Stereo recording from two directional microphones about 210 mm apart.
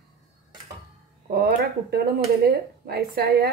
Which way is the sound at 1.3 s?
50° right (ahead or behind).